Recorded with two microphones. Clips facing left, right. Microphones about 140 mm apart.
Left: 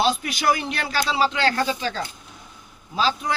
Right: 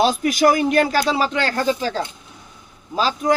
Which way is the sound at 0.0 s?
45° right (ahead or behind).